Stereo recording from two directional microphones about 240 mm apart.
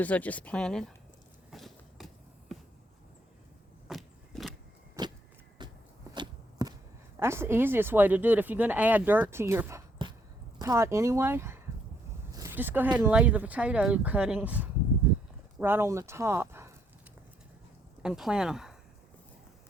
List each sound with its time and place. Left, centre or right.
0.0 s speech: centre
1.5 s a sound: centre
3.8 s vehicle: centre
5.0 s vehicle: centre
5.6 s a sound: centre
6.1 s walk: centre
7.2 s speech: centre
18.0 s speech: centre